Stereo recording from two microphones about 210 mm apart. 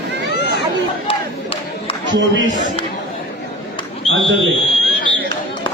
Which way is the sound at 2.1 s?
60° right (ahead or behind).